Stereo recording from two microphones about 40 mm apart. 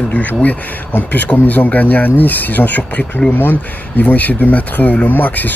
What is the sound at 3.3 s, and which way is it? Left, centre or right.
Speech, left.